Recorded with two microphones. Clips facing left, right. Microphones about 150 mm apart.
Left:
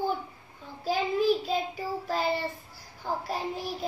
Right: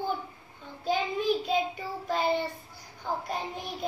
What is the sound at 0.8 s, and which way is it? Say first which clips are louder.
Child singing: left 2 dB; 5° left (ahead or behind).